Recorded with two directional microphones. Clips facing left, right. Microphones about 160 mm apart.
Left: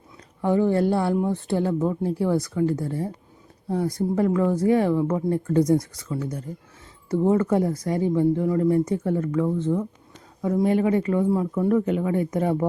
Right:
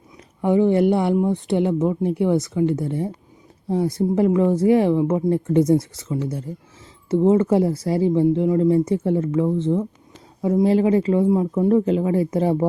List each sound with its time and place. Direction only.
0.4 s speech: 20° right (ahead or behind)